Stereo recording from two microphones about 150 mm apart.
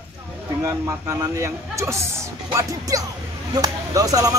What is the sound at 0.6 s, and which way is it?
Speech, 20° right (ahead or behind).